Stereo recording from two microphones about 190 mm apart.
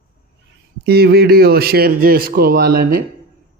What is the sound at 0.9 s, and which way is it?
A man's voice, 55° right (ahead or behind).